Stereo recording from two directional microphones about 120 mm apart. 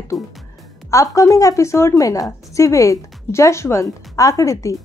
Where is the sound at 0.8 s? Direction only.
25° left (ahead or behind).